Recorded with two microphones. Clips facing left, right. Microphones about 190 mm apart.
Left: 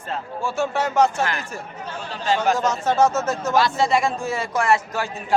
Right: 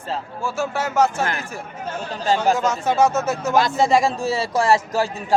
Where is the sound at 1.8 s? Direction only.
45° right (ahead or behind).